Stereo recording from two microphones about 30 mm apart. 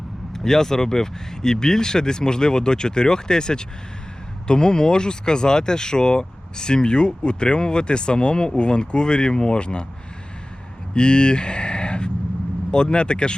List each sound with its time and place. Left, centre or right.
0.3 s speech: centre; by 9.8 s left
10.9 s speech: left